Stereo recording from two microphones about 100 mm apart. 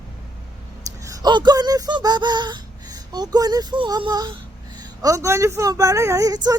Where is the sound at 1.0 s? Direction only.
45° right (ahead or behind).